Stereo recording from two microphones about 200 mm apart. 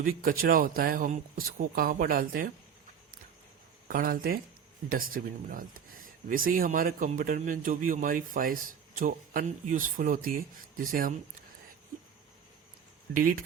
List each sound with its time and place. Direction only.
0.0 s speech: 45° right (ahead or behind)
3.8 s speech: 45° right (ahead or behind)
13.1 s speech: 45° right (ahead or behind)